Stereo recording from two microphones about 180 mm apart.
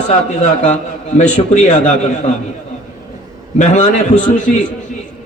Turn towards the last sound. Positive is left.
turn(degrees=45)  # may be behind; listen again after turning